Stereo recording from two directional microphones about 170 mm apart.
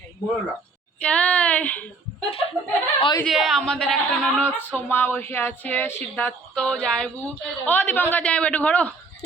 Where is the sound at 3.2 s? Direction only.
Centre (ahead or behind).